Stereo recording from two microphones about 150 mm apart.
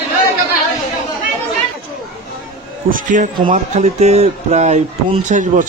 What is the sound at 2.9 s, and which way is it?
A man's voice, 60° right (ahead or behind).